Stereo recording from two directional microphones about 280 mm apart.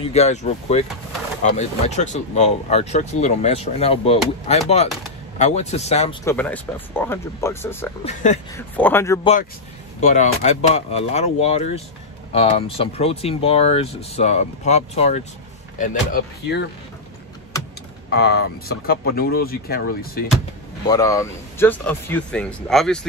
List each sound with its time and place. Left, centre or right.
0.0 s speech: left
6.2 s speech: centre
8.0 s speech: left
8.5 s speech: centre
9.9 s speech: left
18.1 s speech: left
20.9 s speech: centre